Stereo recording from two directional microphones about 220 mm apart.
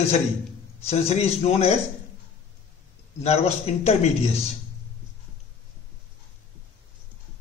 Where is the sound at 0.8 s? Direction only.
30° left (ahead or behind).